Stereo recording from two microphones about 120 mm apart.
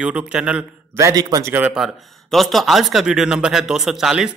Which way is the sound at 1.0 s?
30° right (ahead or behind).